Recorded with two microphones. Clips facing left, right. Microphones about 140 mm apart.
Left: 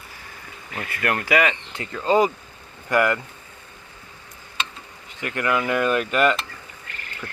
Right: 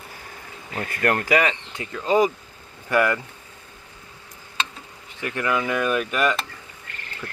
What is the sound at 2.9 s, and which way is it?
Speech, 25° left (ahead or behind).